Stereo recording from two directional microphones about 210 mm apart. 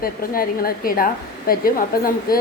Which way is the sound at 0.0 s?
45° left (ahead or behind).